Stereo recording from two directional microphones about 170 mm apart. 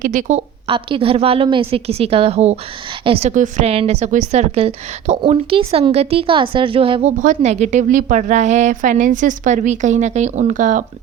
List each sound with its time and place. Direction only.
0.0 s a woman's voice: 50° right (ahead or behind)
0.7 s a woman's voice: 30° right (ahead or behind)
7.2 s a woman's voice: 45° right (ahead or behind)